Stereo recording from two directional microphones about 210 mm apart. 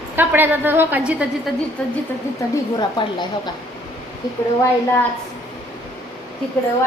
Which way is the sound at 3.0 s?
20° left (ahead or behind).